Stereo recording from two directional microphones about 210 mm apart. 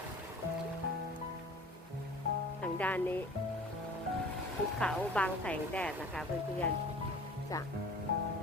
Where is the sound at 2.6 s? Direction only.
10° left (ahead or behind).